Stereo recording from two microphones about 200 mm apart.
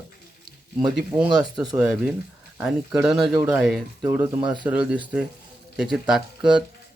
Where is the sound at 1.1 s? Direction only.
5° right (ahead or behind).